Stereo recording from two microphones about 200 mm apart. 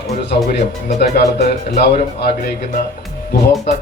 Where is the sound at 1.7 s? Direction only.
50° left (ahead or behind).